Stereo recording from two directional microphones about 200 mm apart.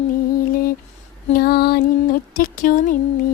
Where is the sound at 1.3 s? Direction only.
50° left (ahead or behind).